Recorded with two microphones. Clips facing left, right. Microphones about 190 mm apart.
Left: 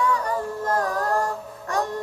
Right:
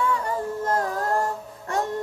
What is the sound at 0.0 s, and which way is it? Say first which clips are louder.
Music: left 1 dB; 25° right (ahead or behind).